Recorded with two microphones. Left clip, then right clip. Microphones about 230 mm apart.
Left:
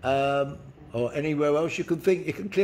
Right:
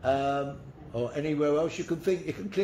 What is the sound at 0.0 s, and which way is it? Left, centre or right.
A man's voice, left.